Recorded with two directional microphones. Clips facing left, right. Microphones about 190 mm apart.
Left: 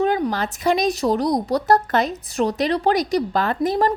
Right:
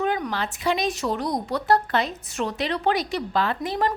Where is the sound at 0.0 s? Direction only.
35° left (ahead or behind).